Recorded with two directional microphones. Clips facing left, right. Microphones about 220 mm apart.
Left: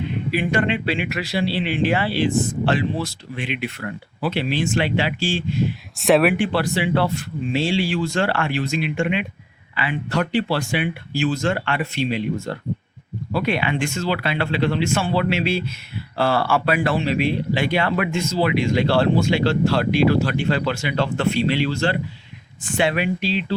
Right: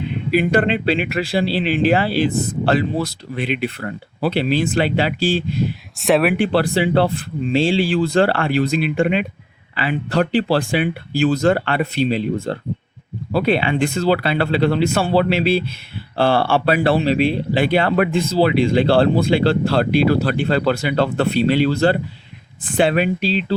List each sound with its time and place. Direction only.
0.5 s speech: 35° right (ahead or behind)
6.0 s speech: centre (ahead or behind)
6.3 s speech: 35° right (ahead or behind)